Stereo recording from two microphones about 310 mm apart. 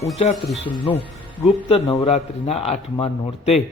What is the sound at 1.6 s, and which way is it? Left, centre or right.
Speech, centre.